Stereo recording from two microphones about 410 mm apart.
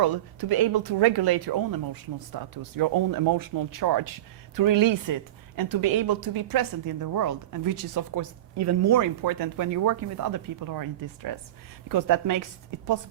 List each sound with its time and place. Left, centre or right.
0.0 s a woman's voice: right